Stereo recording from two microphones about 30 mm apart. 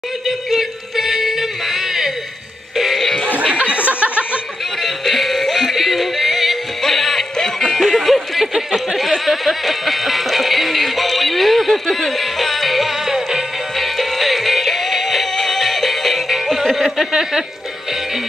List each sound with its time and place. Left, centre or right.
0.5 s music: centre
3.5 s a sound: right
4.0 s chuckle: right
4.8 s music: centre
13.7 s music: centre
17.1 s speech: centre